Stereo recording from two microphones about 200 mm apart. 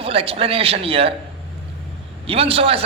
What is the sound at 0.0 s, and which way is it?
A man's voice, 30° right (ahead or behind).